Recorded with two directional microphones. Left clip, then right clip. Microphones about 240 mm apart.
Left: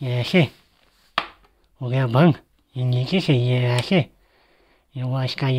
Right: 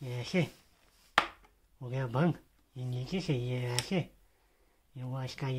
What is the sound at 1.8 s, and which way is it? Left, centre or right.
Speech, left.